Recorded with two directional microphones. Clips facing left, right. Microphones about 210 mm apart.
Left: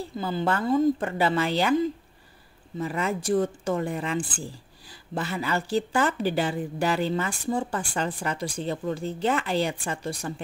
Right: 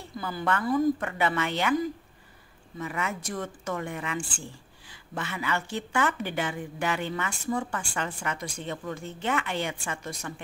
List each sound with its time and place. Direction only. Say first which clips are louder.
0.0 s speech: left 5 dB; 25° left (ahead or behind)